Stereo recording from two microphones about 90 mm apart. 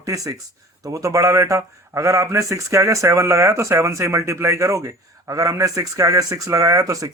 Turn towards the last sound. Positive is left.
turn(degrees=-40)  # may be behind; listen again after turning